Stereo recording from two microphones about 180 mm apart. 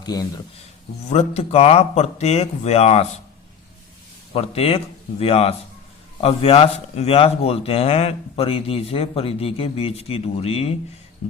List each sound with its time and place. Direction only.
0.0 s speech: 20° left (ahead or behind)
1.0 s a man's voice: 35° left (ahead or behind)
4.4 s a man's voice: 35° left (ahead or behind)